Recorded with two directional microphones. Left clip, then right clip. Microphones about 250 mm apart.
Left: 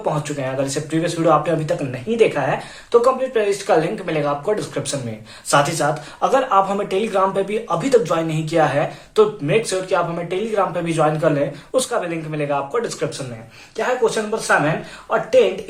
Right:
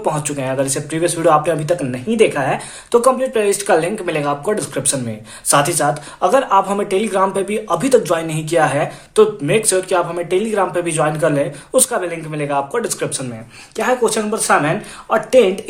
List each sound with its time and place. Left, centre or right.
0.0 s speech: right